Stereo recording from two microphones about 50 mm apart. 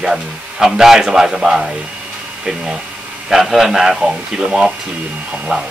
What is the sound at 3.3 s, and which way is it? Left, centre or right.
Speech, centre.